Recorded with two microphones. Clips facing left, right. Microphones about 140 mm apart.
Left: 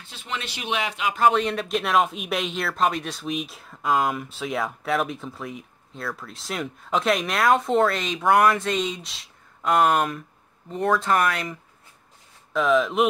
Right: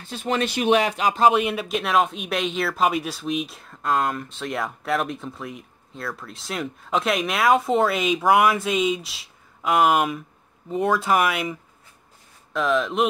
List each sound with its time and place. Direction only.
0.0 s speech: 45° right (ahead or behind)
1.3 s speech: 5° right (ahead or behind)
12.5 s speech: centre (ahead or behind)